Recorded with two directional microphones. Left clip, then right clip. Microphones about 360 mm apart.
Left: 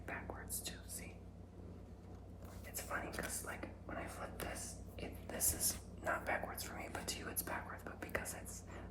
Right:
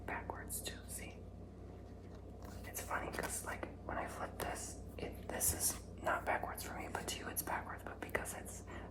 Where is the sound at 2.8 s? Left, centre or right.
Centre.